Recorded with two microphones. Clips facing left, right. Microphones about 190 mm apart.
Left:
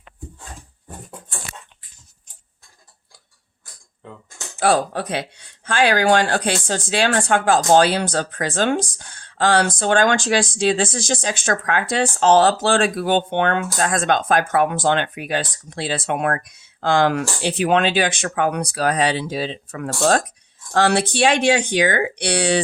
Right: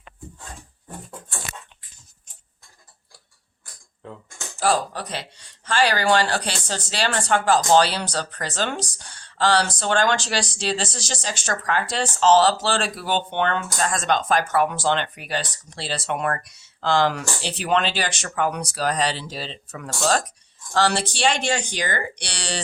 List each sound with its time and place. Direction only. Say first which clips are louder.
4.6 s speech: left 4 dB; 60° left (ahead or behind)